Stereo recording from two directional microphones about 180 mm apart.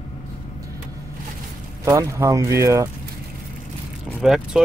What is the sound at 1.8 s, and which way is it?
A man's voice, 15° right (ahead or behind).